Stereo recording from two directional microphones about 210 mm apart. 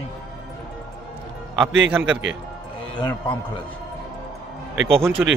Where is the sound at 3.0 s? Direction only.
20° left (ahead or behind).